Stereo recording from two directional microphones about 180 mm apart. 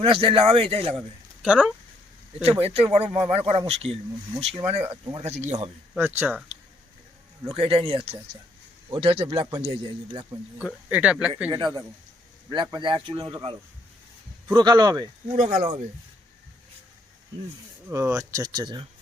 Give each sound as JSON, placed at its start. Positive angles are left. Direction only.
{"t": 0.0, "sound": "speech", "side_deg": -30}
{"t": 0.9, "sound": "speech", "side_deg": 0}
{"t": 2.4, "sound": "speech", "side_deg": -35}
{"t": 6.0, "sound": "speech", "side_deg": -10}
{"t": 7.4, "sound": "speech", "side_deg": -30}
{"t": 10.8, "sound": "speech", "side_deg": -5}
{"t": 11.5, "sound": "speech", "side_deg": -20}
{"t": 15.4, "sound": "speech", "side_deg": -45}
{"t": 17.8, "sound": "speech", "side_deg": -15}